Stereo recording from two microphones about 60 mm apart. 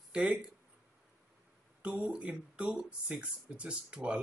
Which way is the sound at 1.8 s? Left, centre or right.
Right.